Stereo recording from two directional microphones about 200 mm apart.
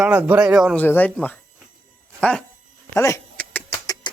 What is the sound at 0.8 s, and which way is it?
Speech, 10° left (ahead or behind).